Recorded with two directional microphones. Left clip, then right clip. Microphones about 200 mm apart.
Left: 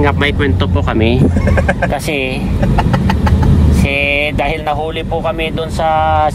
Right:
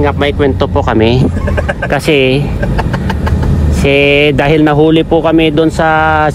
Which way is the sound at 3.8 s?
55° right (ahead or behind).